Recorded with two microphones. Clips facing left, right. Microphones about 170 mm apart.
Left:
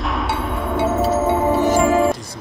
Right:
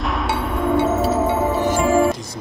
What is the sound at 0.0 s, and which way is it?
Music, centre (ahead or behind).